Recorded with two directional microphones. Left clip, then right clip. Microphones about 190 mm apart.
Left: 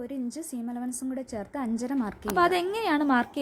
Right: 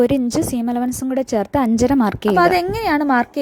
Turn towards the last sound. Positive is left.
turn(degrees=-30)  # may be behind; listen again after turning